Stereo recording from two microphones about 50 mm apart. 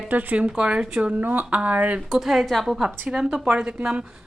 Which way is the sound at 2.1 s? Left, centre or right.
Centre.